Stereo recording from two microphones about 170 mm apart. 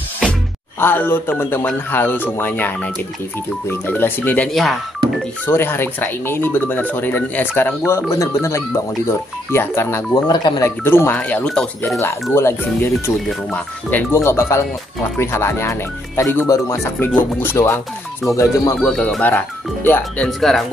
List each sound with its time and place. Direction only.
0.2 s speech: 10° left (ahead or behind)
5.5 s speech: 15° left (ahead or behind)
10.1 s speech: 25° left (ahead or behind)
10.8 s speech: 15° left (ahead or behind)
18.8 s speech: 5° left (ahead or behind)